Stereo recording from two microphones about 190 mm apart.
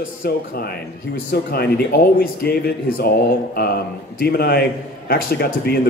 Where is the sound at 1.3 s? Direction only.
55° left (ahead or behind).